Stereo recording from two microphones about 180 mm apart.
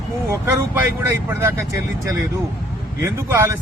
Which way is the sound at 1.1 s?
15° right (ahead or behind).